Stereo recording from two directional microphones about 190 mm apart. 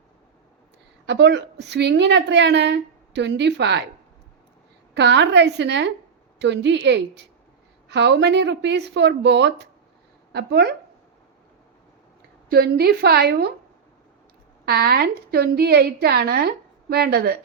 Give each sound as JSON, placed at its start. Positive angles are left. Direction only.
{"t": 1.0, "sound": "a woman's voice", "side_deg": -65}
{"t": 4.9, "sound": "a woman's voice", "side_deg": -65}
{"t": 12.5, "sound": "a woman's voice", "side_deg": -55}
{"t": 14.6, "sound": "a woman's voice", "side_deg": -55}